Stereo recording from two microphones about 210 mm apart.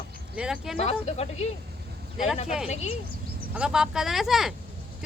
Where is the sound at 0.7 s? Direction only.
30° left (ahead or behind).